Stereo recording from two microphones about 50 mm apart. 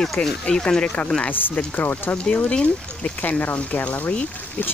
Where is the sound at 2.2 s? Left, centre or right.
Left.